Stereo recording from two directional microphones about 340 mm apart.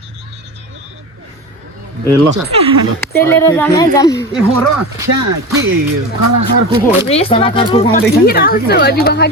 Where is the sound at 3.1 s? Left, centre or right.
Centre.